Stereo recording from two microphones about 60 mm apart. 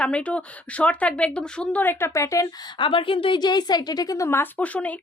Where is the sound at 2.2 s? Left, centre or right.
Left.